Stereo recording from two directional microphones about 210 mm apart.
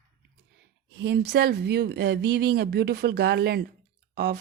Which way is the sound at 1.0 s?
50° right (ahead or behind).